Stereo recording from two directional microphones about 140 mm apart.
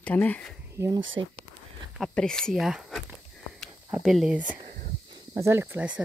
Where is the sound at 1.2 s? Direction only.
30° right (ahead or behind).